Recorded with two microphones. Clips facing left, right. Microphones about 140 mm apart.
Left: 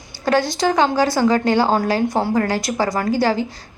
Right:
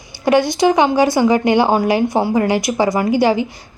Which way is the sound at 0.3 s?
15° right (ahead or behind).